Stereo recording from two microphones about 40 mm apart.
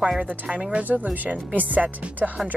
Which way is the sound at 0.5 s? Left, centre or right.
Right.